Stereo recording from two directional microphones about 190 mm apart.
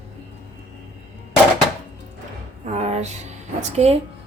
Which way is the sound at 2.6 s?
35° right (ahead or behind).